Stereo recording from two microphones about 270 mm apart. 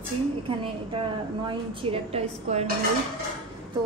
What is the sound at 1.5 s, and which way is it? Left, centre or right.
A woman's voice, right.